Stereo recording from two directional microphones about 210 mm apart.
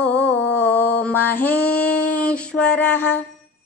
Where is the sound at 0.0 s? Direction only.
5° left (ahead or behind).